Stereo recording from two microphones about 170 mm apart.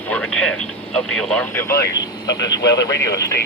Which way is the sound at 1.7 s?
20° left (ahead or behind).